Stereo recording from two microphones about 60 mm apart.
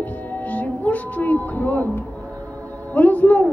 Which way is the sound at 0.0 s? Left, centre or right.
Left.